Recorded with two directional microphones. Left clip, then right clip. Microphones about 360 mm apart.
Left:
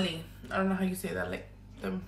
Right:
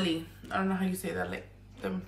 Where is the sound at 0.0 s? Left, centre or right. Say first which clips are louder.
Right 3 dB; centre.